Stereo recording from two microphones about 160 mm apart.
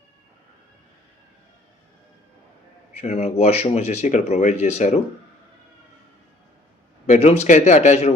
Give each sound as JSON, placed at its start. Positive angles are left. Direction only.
{"t": 2.9, "sound": "speech", "side_deg": 45}
{"t": 7.1, "sound": "speech", "side_deg": 45}